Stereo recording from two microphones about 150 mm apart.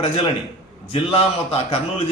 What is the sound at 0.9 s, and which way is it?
Speech, 40° left (ahead or behind).